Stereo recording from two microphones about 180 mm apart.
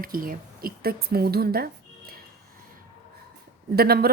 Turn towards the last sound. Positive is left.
turn(degrees=-60)  # may be behind; listen again after turning